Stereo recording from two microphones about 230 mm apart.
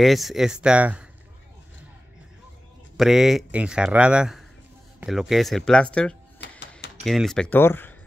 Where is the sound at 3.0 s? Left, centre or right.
Centre.